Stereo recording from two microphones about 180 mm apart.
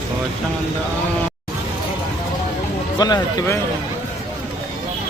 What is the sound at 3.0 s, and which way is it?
Speech, 20° left (ahead or behind).